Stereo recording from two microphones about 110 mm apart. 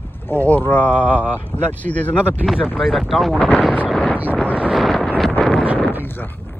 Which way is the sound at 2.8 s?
Centre (ahead or behind).